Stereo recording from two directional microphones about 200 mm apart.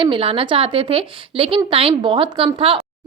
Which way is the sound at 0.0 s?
25° right (ahead or behind).